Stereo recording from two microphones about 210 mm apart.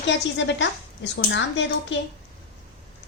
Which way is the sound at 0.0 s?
60° left (ahead or behind).